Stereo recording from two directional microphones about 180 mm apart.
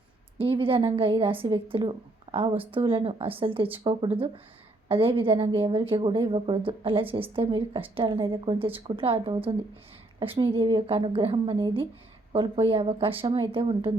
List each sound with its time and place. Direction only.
0.3 s a woman's voice: 30° right (ahead or behind)